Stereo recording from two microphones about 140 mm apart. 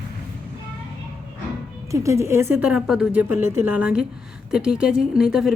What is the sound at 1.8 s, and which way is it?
Speech, 20° right (ahead or behind).